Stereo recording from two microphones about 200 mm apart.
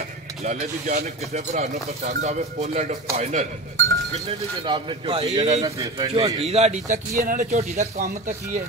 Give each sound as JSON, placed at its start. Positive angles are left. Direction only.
{"t": 0.4, "sound": "speech", "side_deg": -35}
{"t": 4.6, "sound": "a man's voice", "side_deg": -25}
{"t": 5.6, "sound": "a man's voice", "side_deg": -20}
{"t": 6.1, "sound": "speech", "side_deg": -30}